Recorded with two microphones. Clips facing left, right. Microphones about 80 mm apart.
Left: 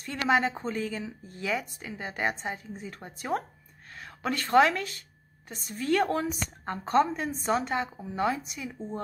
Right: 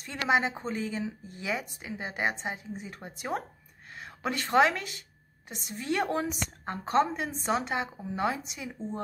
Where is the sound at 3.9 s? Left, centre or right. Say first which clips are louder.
Left 1 dB; right.